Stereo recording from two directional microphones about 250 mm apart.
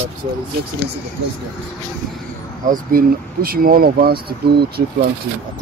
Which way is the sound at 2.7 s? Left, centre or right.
Right.